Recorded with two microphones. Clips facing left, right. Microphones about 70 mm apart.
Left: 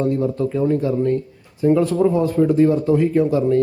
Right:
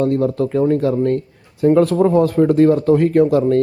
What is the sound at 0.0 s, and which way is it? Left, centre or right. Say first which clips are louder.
Speech: right 3 dB; right.